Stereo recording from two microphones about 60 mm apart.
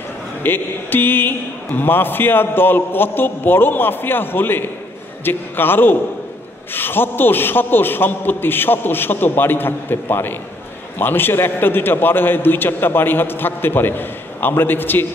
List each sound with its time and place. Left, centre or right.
0.4 s a man's voice: left